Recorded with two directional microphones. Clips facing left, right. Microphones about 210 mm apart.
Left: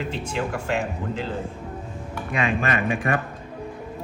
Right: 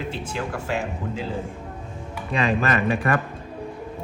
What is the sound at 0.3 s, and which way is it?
Speech, 5° right (ahead or behind).